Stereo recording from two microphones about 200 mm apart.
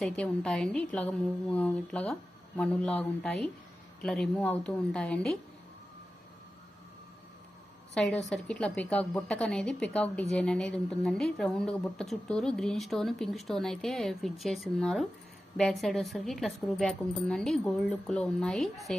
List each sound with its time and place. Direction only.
0.0 s speech: centre (ahead or behind)
7.9 s speech: 5° left (ahead or behind)